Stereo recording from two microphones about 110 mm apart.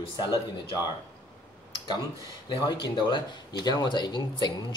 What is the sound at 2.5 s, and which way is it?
Speech, 40° left (ahead or behind).